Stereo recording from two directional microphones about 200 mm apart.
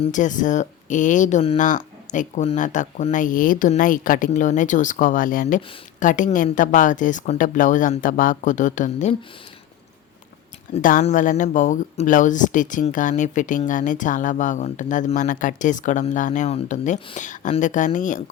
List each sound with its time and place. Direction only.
0.0 s speech: 40° left (ahead or behind)
10.8 s speech: 40° left (ahead or behind)